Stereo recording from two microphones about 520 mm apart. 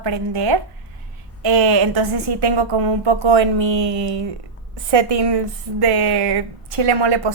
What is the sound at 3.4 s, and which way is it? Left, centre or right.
Speech, right.